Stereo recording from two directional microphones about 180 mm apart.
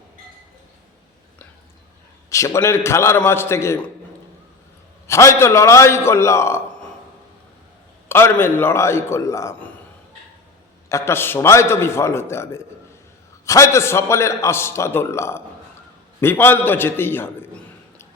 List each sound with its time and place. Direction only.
2.3 s a man's voice: 15° left (ahead or behind)
5.0 s a man's voice: 15° left (ahead or behind)
8.0 s a man's voice: 10° left (ahead or behind)
10.8 s a man's voice: 15° left (ahead or behind)